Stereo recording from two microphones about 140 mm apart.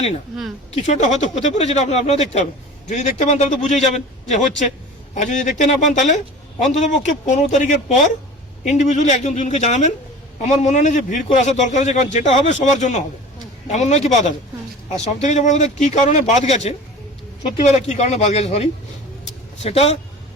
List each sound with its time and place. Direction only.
0.7 s a man's voice: 55° left (ahead or behind)